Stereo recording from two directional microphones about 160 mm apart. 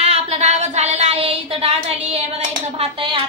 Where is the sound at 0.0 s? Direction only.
40° right (ahead or behind).